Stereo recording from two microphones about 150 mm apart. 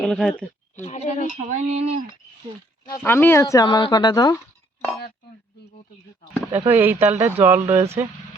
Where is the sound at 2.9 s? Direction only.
15° left (ahead or behind).